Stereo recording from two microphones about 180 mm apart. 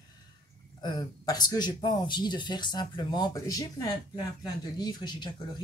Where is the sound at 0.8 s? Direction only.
25° left (ahead or behind).